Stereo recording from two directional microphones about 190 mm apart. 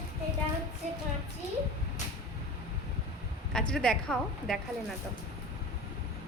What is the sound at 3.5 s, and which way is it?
A woman's voice, 5° left (ahead or behind).